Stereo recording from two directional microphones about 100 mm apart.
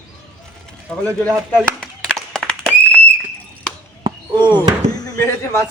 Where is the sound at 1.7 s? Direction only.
5° left (ahead or behind).